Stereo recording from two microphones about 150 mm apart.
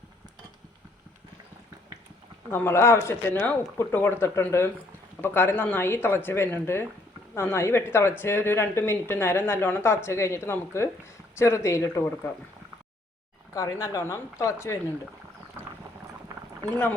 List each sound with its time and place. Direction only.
2.5 s speech: 15° left (ahead or behind)
13.5 s speech: 20° left (ahead or behind)
15.6 s boat: 15° right (ahead or behind)